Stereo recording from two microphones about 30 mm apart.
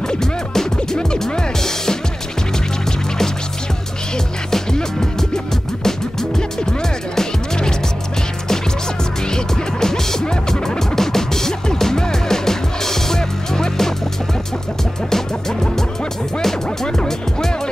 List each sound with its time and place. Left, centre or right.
0.1 s music: centre
5.9 s music: centre
9.3 s music: centre
15.0 s music: centre
16.8 s music: left